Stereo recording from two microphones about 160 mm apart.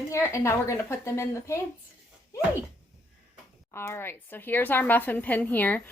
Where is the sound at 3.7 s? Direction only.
15° left (ahead or behind).